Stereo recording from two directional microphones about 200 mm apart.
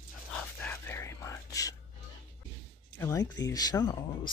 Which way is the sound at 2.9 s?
15° left (ahead or behind).